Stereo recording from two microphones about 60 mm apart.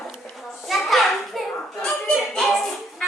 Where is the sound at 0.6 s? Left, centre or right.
Centre.